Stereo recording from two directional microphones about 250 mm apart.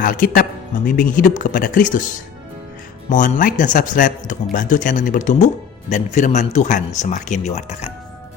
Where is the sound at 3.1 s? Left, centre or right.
Left.